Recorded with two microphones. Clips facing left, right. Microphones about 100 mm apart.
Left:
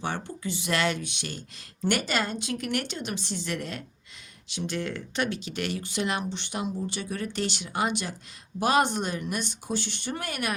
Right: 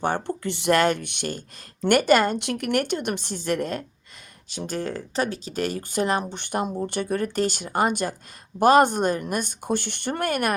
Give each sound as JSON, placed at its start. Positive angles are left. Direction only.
{"t": 0.0, "sound": "speech", "side_deg": -55}